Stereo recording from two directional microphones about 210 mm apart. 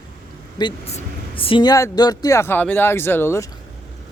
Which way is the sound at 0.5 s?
25° left (ahead or behind).